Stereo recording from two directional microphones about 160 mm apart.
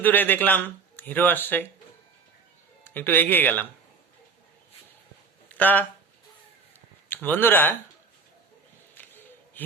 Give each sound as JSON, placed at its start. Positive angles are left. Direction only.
{"t": 0.0, "sound": "speech", "side_deg": 10}
{"t": 2.8, "sound": "speech", "side_deg": 15}
{"t": 5.5, "sound": "speech", "side_deg": 10}
{"t": 7.1, "sound": "speech", "side_deg": 10}
{"t": 9.0, "sound": "a sound", "side_deg": 10}